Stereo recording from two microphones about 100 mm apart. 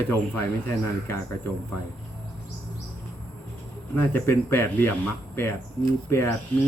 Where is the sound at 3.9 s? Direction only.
20° left (ahead or behind).